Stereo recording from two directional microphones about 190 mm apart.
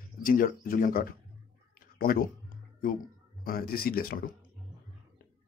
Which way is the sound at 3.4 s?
50° left (ahead or behind).